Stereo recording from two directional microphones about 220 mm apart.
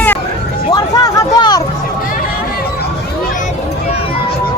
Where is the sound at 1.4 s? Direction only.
20° left (ahead or behind).